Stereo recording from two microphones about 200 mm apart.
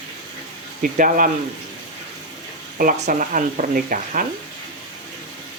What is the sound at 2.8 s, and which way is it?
Speech, 40° right (ahead or behind).